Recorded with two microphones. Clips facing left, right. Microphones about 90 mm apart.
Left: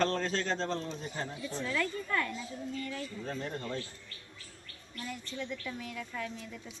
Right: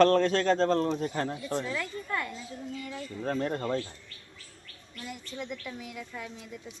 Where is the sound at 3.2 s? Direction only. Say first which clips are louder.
Right 10 dB; 50° right (ahead or behind).